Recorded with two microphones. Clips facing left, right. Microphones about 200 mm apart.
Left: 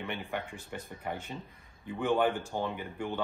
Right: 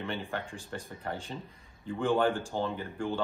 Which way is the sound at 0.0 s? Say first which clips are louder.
Right 1 dB; 15° left (ahead or behind).